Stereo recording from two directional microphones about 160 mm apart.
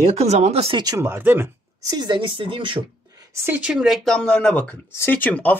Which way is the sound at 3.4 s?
10° right (ahead or behind).